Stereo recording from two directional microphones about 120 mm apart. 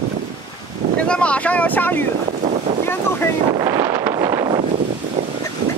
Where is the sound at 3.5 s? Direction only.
30° right (ahead or behind).